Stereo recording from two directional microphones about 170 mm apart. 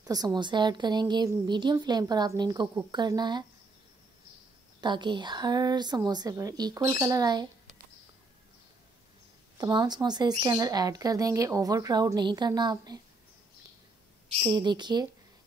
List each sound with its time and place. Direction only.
0.0 s a woman's voice: 20° right (ahead or behind)
4.7 s a woman's voice: 25° right (ahead or behind)
9.6 s a woman's voice: 25° right (ahead or behind)
14.4 s a woman's voice: 25° right (ahead or behind)